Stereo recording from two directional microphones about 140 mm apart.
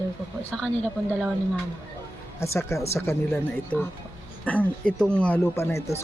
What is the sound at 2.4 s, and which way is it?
Speech, 20° left (ahead or behind).